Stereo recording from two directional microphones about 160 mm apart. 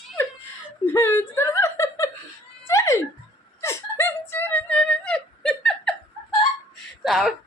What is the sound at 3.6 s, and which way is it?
Whimper, 15° left (ahead or behind).